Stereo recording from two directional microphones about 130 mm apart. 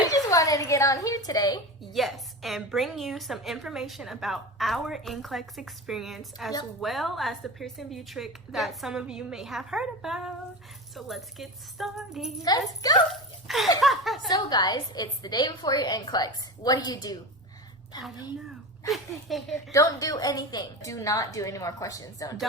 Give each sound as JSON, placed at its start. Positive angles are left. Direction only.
{"t": 0.1, "sound": "a sound", "side_deg": 25}
{"t": 1.9, "sound": "a woman's voice", "side_deg": 0}
{"t": 12.4, "sound": "a woman's voice", "side_deg": 30}
{"t": 13.1, "sound": "a woman's voice", "side_deg": 0}
{"t": 14.3, "sound": "a woman's voice", "side_deg": 30}
{"t": 18.9, "sound": "a woman's voice", "side_deg": 0}
{"t": 19.7, "sound": "a woman's voice", "side_deg": 25}